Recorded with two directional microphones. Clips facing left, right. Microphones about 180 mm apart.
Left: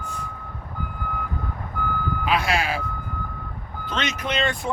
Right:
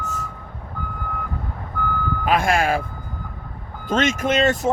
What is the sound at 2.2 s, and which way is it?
Speech, 50° right (ahead or behind).